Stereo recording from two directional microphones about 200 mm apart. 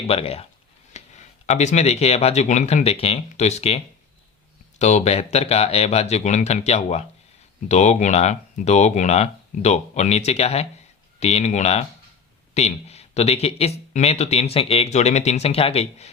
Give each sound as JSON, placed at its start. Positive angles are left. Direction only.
{"t": 0.1, "sound": "speech", "side_deg": 30}
{"t": 4.8, "sound": "speech", "side_deg": 35}